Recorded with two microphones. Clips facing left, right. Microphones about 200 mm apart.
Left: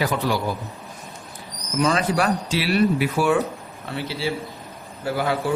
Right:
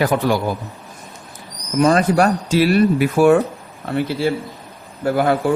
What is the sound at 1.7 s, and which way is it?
A man's voice, 45° right (ahead or behind).